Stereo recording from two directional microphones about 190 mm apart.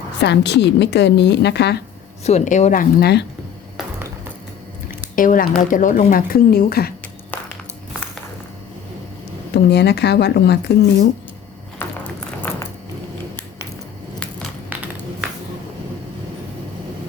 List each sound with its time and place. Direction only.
0.2 s a woman's voice: 65° left (ahead or behind)
2.2 s speech: 40° left (ahead or behind)
3.0 s a woman's voice: 60° left (ahead or behind)
5.1 s speech: 45° left (ahead or behind)
9.6 s a woman's voice: 60° left (ahead or behind)
11.8 s a sound: 10° left (ahead or behind)